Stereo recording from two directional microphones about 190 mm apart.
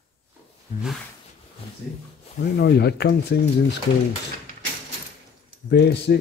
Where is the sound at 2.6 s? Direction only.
60° left (ahead or behind).